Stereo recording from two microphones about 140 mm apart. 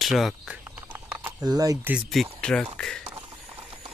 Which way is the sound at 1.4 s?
25° right (ahead or behind).